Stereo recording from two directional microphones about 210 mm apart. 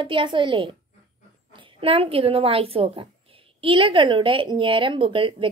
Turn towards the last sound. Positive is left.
turn(degrees=-25)  # may be behind; listen again after turning